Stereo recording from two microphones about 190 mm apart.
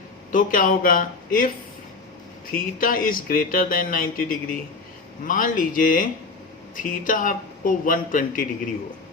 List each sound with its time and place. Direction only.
0.3 s speech: 45° left (ahead or behind)